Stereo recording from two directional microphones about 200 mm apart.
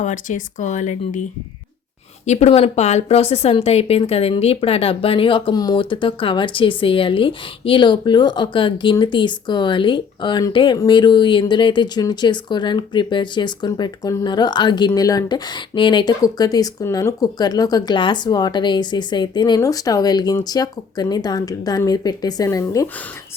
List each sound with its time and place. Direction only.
0.0 s speech: 40° left (ahead or behind)
2.2 s a woman's voice: 35° left (ahead or behind); by 22.9 s 15° left (ahead or behind)